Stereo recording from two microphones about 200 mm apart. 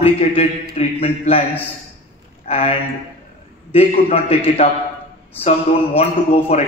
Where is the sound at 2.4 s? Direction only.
30° left (ahead or behind).